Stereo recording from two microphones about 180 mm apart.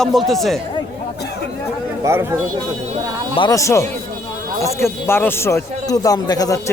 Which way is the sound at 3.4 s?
20° left (ahead or behind).